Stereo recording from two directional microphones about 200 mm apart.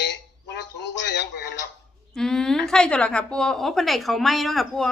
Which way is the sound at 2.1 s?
5° left (ahead or behind).